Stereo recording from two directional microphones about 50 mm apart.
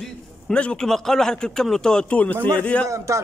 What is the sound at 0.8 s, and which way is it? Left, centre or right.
Speech, centre.